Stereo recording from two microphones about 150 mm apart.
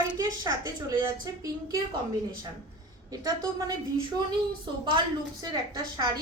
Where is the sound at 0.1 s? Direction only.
25° right (ahead or behind).